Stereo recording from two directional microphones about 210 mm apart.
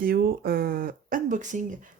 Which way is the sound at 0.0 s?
45° right (ahead or behind).